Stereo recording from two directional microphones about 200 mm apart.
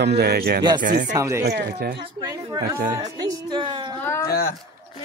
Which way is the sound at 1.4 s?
55° right (ahead or behind).